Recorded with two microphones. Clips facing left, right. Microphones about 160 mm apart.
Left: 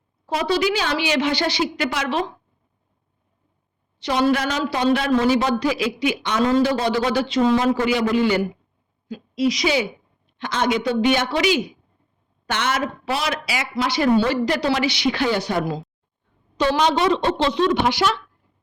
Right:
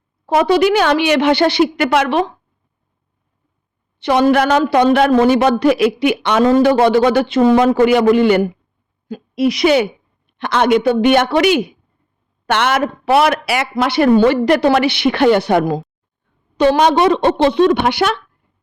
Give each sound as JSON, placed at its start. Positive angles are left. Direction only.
{"t": 0.3, "sound": "a woman's voice", "side_deg": -55}
{"t": 4.0, "sound": "a woman's voice", "side_deg": -60}